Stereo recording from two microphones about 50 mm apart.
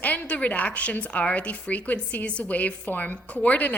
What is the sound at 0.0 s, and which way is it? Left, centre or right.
A woman's voice, left.